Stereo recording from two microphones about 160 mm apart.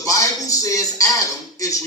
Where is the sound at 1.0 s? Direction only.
20° left (ahead or behind).